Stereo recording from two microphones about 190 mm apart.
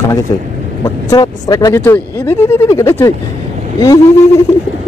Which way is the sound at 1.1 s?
20° left (ahead or behind).